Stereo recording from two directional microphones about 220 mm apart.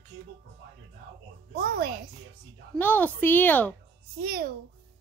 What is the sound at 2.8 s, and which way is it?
Speech, 10° left (ahead or behind).